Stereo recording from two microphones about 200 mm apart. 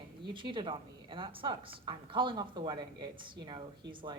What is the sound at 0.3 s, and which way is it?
A woman's voice, 25° right (ahead or behind).